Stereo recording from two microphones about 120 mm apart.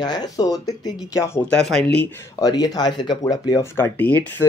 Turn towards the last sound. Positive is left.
turn(degrees=15)  # may be behind; listen again after turning